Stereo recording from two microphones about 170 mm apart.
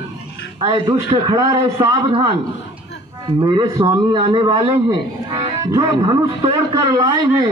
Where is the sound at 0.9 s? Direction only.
20° right (ahead or behind).